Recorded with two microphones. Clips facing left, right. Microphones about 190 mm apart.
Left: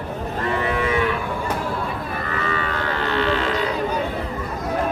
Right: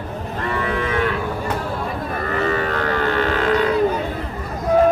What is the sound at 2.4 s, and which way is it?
Cattle, 45° right (ahead or behind).